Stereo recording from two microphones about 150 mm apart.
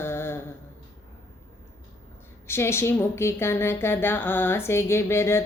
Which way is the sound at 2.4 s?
15° left (ahead or behind).